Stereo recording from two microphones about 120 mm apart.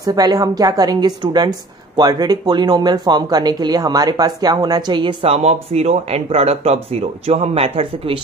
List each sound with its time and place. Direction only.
0.0 s speech: 35° right (ahead or behind); by 8.2 s 50° right (ahead or behind)